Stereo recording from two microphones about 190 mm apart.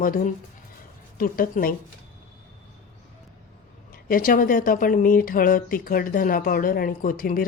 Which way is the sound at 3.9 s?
50° left (ahead or behind).